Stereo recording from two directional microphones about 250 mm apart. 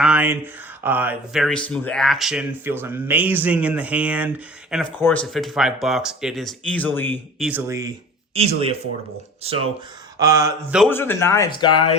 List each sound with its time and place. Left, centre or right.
0.0 s speech: centre
4.9 s speech: centre
7.4 s speech: centre
8.4 s speech: right
10.2 s speech: centre
10.8 s speech: centre